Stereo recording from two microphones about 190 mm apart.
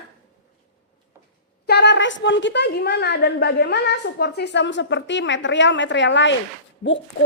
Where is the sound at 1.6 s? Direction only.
65° left (ahead or behind).